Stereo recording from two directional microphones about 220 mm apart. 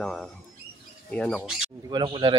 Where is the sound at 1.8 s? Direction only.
20° right (ahead or behind).